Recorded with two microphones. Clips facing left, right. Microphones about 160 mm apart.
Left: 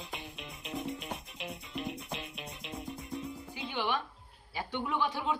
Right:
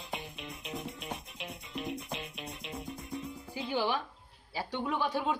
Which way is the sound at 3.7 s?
35° right (ahead or behind).